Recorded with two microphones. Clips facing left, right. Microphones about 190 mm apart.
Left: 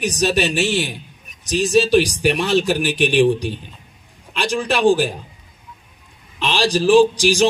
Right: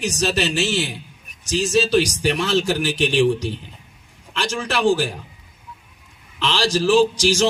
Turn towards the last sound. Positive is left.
turn(degrees=15)  # may be behind; listen again after turning